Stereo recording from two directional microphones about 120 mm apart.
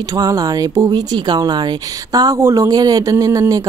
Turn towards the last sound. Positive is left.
turn(degrees=-30)  # may be behind; listen again after turning